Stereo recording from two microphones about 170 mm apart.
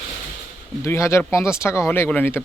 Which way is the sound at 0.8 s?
15° left (ahead or behind).